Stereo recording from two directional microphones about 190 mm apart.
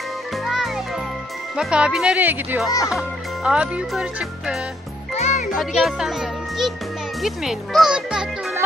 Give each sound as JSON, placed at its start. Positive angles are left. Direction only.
{"t": 1.6, "sound": "speech", "side_deg": -5}
{"t": 5.1, "sound": "music", "side_deg": 35}
{"t": 5.5, "sound": "a child's voice", "side_deg": 0}